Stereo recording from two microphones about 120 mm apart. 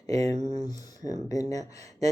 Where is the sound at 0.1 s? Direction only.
30° left (ahead or behind).